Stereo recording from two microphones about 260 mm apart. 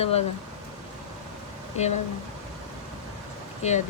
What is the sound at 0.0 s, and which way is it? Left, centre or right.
Speech, left.